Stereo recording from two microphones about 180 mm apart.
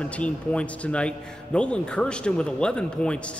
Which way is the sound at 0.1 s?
5° left (ahead or behind).